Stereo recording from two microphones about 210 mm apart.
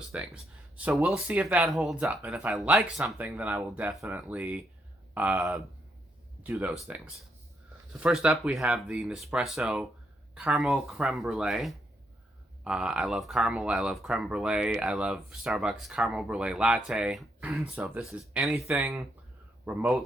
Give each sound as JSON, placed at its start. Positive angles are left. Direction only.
{"t": 0.1, "sound": "speech", "side_deg": -5}